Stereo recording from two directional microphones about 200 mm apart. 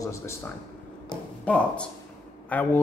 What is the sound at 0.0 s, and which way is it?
Speech, 15° left (ahead or behind).